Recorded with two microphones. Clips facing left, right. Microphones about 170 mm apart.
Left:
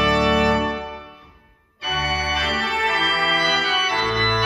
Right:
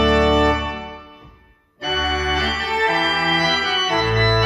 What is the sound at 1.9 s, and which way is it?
Organ, 45° right (ahead or behind).